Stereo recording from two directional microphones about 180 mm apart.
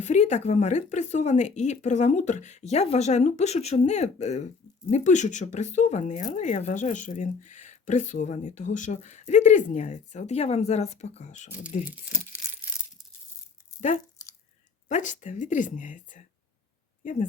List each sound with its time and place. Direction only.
0.0 s speech: 40° left (ahead or behind)
14.2 s drip: 20° left (ahead or behind)
14.8 s a woman's voice: 45° left (ahead or behind)